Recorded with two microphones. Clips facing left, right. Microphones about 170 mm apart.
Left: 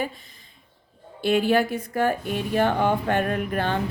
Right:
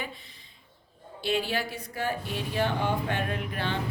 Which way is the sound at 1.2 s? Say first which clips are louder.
Left 9 dB; 50° left (ahead or behind).